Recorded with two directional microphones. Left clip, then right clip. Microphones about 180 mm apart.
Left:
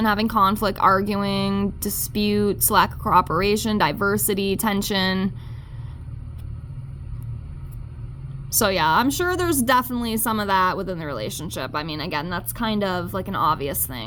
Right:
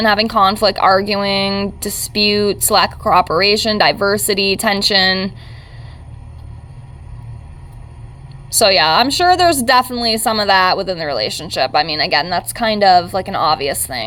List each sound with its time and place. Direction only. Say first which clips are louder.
0.0 s speech: right 7 dB; 40° left (ahead or behind)
8.5 s speech: right 8 dB; 40° left (ahead or behind)